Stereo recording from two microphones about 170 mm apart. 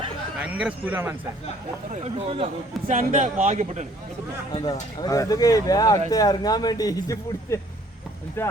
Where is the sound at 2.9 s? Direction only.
50° right (ahead or behind).